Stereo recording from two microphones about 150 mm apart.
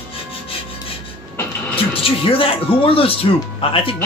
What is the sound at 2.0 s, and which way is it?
Speech, 35° left (ahead or behind).